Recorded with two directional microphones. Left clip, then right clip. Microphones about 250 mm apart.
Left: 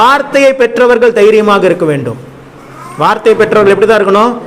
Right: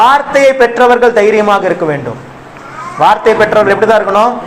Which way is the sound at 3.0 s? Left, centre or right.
Left.